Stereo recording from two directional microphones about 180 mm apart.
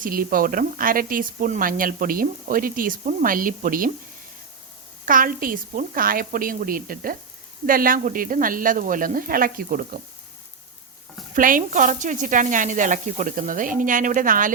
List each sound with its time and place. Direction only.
0.0 s speech: 50° right (ahead or behind)
5.0 s speech: 50° right (ahead or behind)
11.3 s speech: 50° right (ahead or behind)